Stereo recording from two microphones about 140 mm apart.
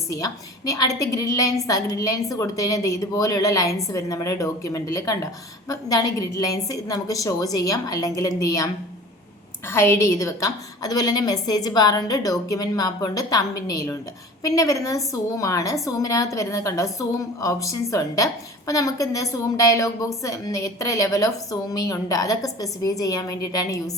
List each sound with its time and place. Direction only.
0.1 s speech: 25° left (ahead or behind)